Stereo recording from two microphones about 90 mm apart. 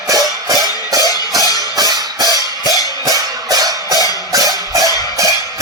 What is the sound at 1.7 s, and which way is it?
Music, 45° right (ahead or behind).